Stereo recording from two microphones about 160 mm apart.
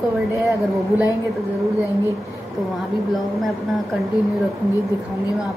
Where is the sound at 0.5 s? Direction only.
10° right (ahead or behind).